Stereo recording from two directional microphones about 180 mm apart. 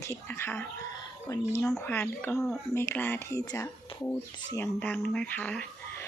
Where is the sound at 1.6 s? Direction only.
5° left (ahead or behind).